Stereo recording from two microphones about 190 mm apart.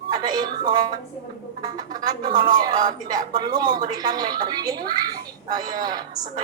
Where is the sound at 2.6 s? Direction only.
20° right (ahead or behind).